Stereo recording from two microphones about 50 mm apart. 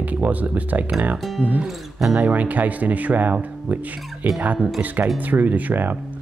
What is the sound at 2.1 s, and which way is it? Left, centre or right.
Speech, right.